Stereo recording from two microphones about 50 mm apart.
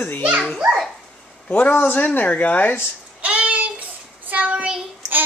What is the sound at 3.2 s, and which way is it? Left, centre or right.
Child singing, right.